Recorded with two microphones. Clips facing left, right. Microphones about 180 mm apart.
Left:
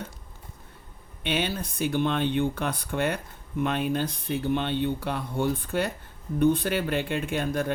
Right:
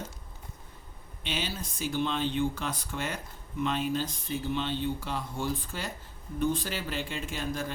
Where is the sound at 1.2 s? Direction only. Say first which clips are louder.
Left 7 dB; 60° left (ahead or behind).